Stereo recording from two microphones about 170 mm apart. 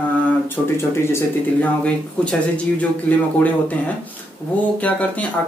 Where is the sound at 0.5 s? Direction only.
15° left (ahead or behind).